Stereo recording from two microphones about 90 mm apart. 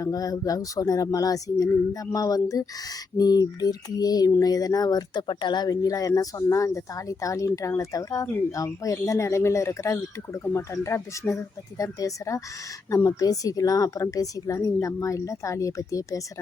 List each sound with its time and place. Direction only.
0.0 s speech: 40° left (ahead or behind)
3.2 s a sound: 45° left (ahead or behind)
4.3 s speech: 40° left (ahead or behind)